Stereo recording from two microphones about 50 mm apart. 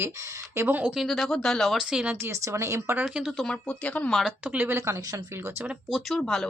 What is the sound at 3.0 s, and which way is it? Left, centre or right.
Speech, centre.